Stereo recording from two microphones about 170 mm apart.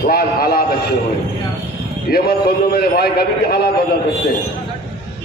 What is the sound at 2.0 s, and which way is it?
A man's voice, 65° left (ahead or behind).